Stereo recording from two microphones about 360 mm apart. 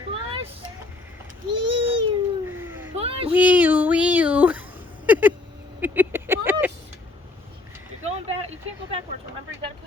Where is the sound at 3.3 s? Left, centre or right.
Centre.